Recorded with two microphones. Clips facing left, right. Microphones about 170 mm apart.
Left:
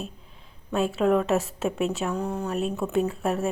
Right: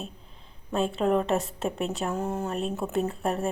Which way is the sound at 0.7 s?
5° left (ahead or behind).